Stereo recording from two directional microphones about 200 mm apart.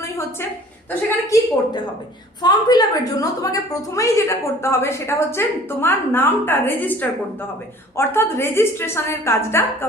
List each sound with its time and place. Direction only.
0.9 s a woman's voice: 15° left (ahead or behind)